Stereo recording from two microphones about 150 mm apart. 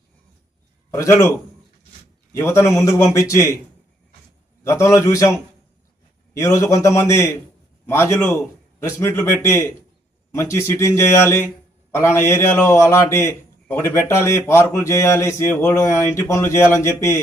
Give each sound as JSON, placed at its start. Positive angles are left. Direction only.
{"t": 0.9, "sound": "a man's voice", "side_deg": 20}
{"t": 4.6, "sound": "a man's voice", "side_deg": 20}
{"t": 6.4, "sound": "a man's voice", "side_deg": 20}